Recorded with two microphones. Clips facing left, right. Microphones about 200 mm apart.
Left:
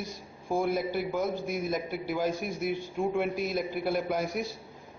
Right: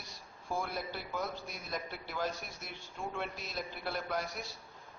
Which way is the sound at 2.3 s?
50° left (ahead or behind).